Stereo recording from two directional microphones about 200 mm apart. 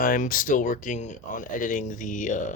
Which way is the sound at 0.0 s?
45° left (ahead or behind).